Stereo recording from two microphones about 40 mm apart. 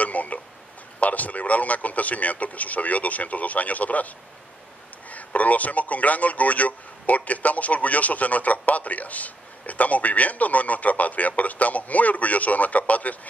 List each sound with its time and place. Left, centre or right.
0.0 s a sound: left
0.9 s speech: left
5.1 s speech: left